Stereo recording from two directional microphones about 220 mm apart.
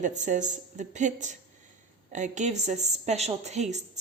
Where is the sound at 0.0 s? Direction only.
35° right (ahead or behind).